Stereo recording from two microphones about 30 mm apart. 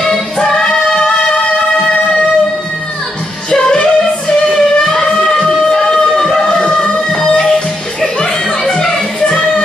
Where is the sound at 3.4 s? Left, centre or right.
Left.